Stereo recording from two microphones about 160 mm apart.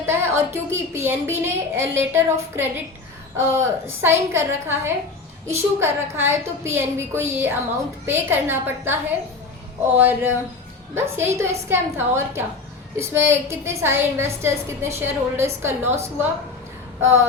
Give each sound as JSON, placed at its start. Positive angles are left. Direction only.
{"t": 0.0, "sound": "a woman's voice", "side_deg": -15}